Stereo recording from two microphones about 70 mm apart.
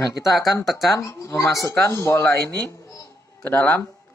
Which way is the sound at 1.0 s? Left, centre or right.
Left.